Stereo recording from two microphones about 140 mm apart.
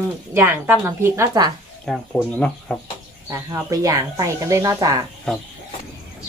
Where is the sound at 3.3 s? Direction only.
20° right (ahead or behind).